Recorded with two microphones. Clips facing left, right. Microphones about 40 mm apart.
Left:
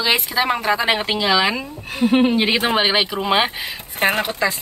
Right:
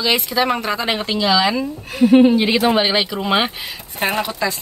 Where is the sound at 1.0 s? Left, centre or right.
Left.